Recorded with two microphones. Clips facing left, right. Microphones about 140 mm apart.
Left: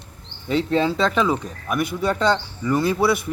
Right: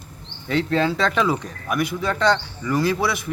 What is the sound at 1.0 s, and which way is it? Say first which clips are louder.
Speech: left 1 dB; centre (ahead or behind).